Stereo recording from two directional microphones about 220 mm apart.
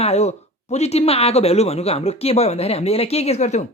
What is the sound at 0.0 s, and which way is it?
A man's voice, 30° left (ahead or behind).